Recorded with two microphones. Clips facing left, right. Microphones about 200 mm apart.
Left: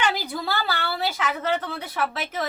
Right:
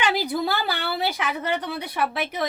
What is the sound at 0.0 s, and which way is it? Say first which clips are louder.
A woman's voice: right 3 dB; 15° right (ahead or behind).